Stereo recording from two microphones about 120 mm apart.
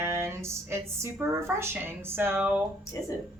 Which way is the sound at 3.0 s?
20° left (ahead or behind).